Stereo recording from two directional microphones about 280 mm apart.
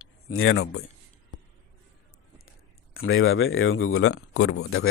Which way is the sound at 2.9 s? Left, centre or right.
Left.